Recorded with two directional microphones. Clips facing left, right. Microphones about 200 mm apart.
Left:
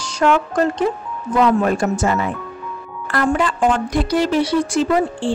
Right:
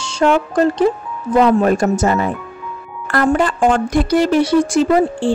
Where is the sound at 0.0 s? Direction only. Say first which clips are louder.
Right 2 dB; 30° right (ahead or behind).